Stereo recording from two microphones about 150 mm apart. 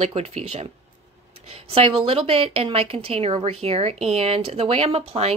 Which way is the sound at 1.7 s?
35° right (ahead or behind).